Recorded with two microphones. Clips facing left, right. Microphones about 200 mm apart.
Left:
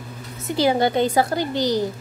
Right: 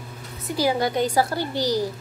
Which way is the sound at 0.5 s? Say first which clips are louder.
Left 3 dB; 25° left (ahead or behind).